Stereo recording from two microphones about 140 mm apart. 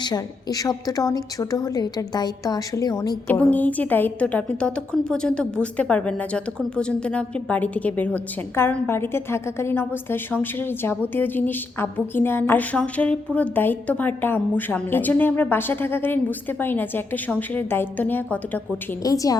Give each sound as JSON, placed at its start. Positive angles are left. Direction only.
{"t": 0.0, "sound": "a woman's voice", "side_deg": 30}
{"t": 3.2, "sound": "a woman's voice", "side_deg": 10}
{"t": 19.0, "sound": "a woman's voice", "side_deg": 25}